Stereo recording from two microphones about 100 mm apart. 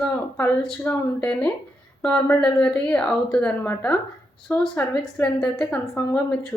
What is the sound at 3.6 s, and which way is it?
A woman's voice, 20° left (ahead or behind).